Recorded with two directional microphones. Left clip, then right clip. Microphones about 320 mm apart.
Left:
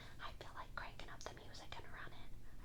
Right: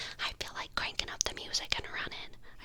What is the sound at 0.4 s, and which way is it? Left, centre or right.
Whispering, right.